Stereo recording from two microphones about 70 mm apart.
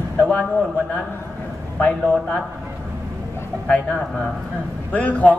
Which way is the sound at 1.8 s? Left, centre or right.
Centre.